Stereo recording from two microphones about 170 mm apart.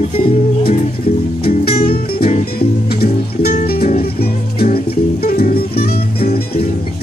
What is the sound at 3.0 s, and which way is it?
Music, 65° left (ahead or behind).